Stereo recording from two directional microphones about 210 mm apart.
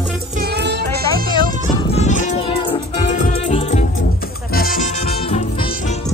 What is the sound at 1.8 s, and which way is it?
Music, 30° left (ahead or behind).